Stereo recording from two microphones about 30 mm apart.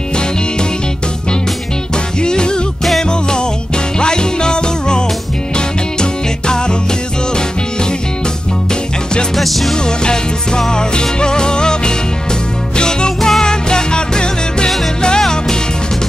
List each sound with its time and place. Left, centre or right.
2.2 s music: left
9.4 s music: centre
9.8 s music: left